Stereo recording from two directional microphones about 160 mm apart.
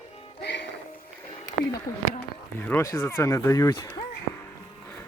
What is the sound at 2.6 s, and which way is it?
Speech, 15° left (ahead or behind).